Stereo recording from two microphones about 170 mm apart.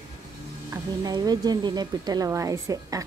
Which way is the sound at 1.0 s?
25° right (ahead or behind).